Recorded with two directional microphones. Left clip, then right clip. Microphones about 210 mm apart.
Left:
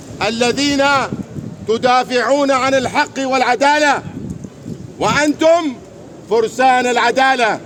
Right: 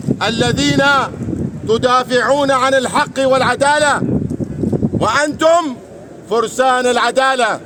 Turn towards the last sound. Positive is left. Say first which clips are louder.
# even
turn(degrees=-10)  # may be behind; listen again after turning